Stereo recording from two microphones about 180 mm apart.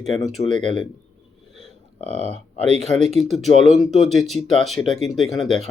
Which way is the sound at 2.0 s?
35° right (ahead or behind).